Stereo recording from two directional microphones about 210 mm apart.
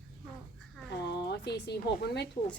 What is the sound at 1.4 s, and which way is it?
Speech, 50° left (ahead or behind).